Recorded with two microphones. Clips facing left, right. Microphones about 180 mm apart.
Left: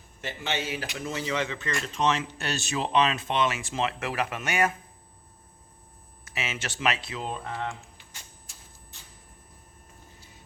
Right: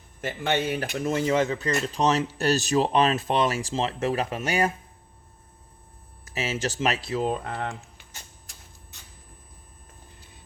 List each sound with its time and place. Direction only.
0.2 s speech: 50° right (ahead or behind); by 4.7 s 30° right (ahead or behind)
6.2 s speech: 35° right (ahead or behind); by 7.7 s 50° right (ahead or behind)